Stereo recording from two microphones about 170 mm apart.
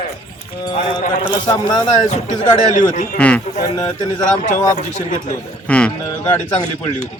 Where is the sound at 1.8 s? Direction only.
45° left (ahead or behind).